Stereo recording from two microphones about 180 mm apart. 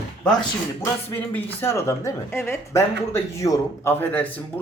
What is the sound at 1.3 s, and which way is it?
Speech, 10° left (ahead or behind).